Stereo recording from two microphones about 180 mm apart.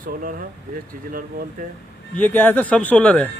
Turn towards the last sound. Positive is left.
turn(degrees=10)  # may be behind; listen again after turning